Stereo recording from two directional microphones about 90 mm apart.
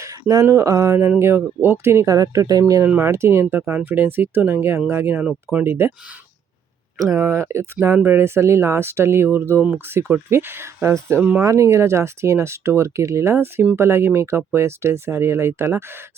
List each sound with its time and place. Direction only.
0.0 s speech: 40° right (ahead or behind)
2.0 s speech: 40° right (ahead or behind)
2.8 s speech: 20° right (ahead or behind)
3.1 s speech: 30° right (ahead or behind)
7.0 s speech: 35° right (ahead or behind)
11.2 s speech: 15° right (ahead or behind)
11.4 s speech: 35° right (ahead or behind)